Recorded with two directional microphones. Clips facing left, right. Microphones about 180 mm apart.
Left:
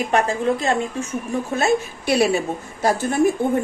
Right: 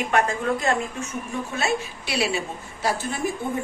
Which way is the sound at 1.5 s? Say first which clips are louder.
Left 6 dB; 45° left (ahead or behind).